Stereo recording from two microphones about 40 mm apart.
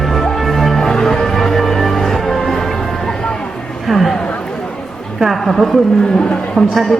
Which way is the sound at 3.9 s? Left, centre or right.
Centre.